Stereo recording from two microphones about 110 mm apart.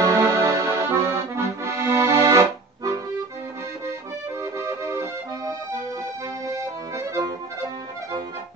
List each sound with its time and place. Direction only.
0.0 s accordion: 25° right (ahead or behind)
4.4 s music: 25° right (ahead or behind)